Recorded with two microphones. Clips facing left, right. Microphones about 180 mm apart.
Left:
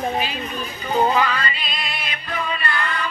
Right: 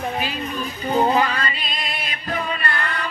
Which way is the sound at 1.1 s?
40° right (ahead or behind).